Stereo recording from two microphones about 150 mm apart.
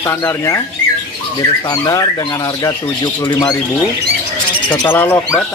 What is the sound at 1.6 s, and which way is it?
Speech, 25° left (ahead or behind).